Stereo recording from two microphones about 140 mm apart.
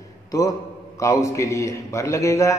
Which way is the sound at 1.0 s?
20° left (ahead or behind).